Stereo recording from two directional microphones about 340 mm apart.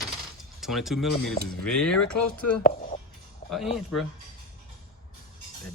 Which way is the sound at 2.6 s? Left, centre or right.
Left.